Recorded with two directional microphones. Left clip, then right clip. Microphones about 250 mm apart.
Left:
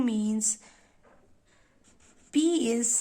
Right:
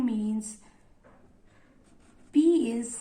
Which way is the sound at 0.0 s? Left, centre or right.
Left.